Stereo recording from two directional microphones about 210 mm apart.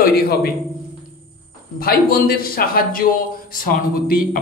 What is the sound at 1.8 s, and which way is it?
A man's voice, 45° left (ahead or behind).